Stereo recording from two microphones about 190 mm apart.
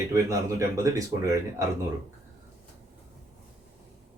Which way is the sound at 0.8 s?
15° right (ahead or behind).